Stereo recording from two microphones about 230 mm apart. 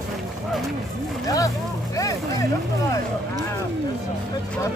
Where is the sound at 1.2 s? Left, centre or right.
Centre.